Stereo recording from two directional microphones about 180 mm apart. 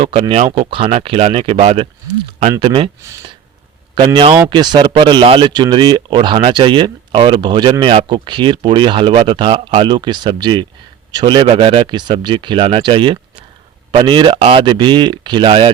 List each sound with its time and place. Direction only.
0.0 s speech: 30° right (ahead or behind)
3.9 s speech: 25° right (ahead or behind)